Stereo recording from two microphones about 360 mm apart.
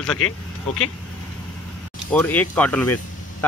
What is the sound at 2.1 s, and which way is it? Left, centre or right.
Speech, centre.